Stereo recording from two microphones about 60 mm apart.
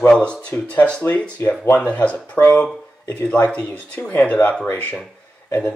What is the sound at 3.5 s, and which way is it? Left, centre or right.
Speech, left.